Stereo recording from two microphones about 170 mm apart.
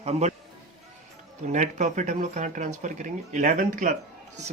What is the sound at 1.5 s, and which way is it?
Speech, 45° right (ahead or behind).